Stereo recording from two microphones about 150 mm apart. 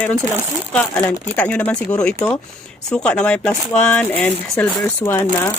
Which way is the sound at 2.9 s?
5° left (ahead or behind).